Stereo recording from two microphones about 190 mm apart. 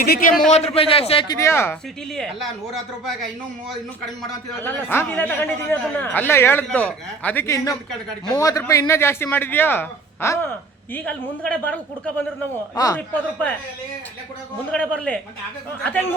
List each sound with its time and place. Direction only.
0.0 s a man's voice: 50° left (ahead or behind)
0.5 s a man's voice: 35° left (ahead or behind)
1.4 s a man's voice: 15° left (ahead or behind)
2.1 s speech: 5° left (ahead or behind)
4.3 s a man's voice: 10° left (ahead or behind)
12.7 s a man's voice: 20° left (ahead or behind)
14.7 s a man's voice: 5° left (ahead or behind)